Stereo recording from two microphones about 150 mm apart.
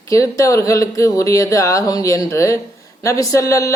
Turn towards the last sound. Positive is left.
turn(degrees=20)  # may be behind; listen again after turning